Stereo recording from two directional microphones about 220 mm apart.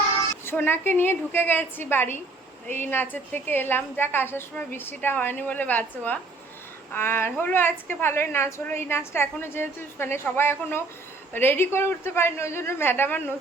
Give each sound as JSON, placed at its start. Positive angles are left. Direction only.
{"t": 0.4, "sound": "a woman's voice", "side_deg": 10}